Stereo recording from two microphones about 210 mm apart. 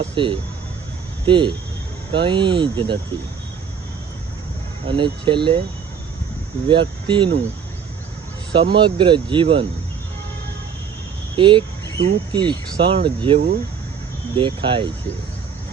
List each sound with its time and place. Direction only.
0.0 s speech: 25° right (ahead or behind)
4.9 s speech: 25° right (ahead or behind)
6.7 s speech: 25° right (ahead or behind)
8.5 s speech: 25° right (ahead or behind)
11.3 s speech: 25° right (ahead or behind)